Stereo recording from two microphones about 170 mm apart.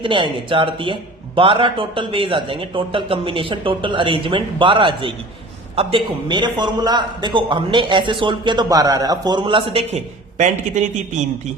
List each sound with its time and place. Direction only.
0.0 s a man's voice: 30° right (ahead or behind); by 10.9 s 45° right (ahead or behind)